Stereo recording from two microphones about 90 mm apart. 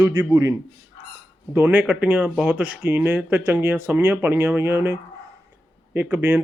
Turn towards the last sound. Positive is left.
turn(degrees=-25)  # may be behind; listen again after turning